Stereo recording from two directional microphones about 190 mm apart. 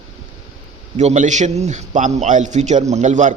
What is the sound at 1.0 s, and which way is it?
A man's voice, 40° right (ahead or behind).